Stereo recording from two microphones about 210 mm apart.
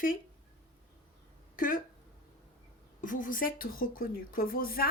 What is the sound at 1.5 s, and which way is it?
Speech, 40° left (ahead or behind).